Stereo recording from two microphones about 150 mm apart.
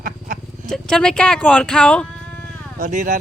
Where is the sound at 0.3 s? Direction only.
75° right (ahead or behind).